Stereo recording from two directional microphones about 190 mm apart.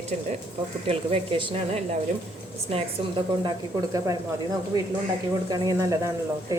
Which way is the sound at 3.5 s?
20° right (ahead or behind).